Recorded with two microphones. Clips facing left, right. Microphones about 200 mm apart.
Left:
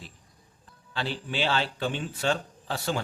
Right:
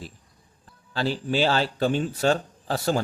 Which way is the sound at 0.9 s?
40° right (ahead or behind).